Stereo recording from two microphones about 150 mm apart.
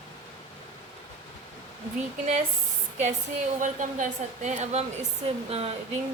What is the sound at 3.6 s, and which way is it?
A woman's voice, 55° right (ahead or behind).